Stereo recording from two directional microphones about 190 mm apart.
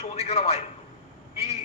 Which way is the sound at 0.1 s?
30° left (ahead or behind).